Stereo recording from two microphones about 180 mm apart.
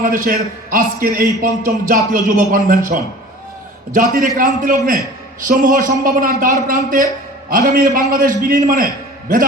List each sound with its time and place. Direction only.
0.0 s a man's voice: 50° right (ahead or behind)